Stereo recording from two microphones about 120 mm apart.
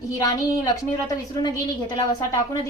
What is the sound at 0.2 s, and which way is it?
Speech, 30° left (ahead or behind).